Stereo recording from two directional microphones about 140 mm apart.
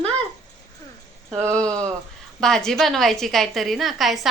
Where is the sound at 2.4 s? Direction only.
5° left (ahead or behind).